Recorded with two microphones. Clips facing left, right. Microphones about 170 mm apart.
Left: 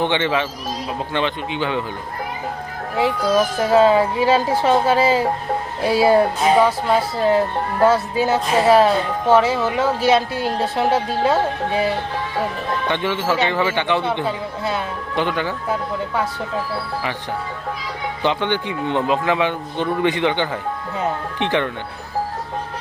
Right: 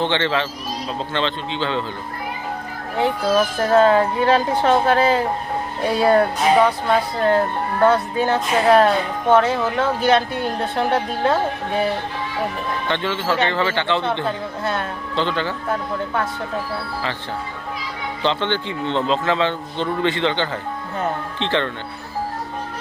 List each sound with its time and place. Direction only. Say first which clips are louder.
0.0 s speech: left 1 dB; 15° left (ahead or behind)
3.6 s speech: left 1 dB; 5° left (ahead or behind)
12.9 s speech: left 1 dB; 15° left (ahead or behind)
14.3 s speech: even; centre (ahead or behind)
15.1 s speech: left 1 dB; 15° left (ahead or behind)
18.2 s speech: left 1 dB; 15° left (ahead or behind)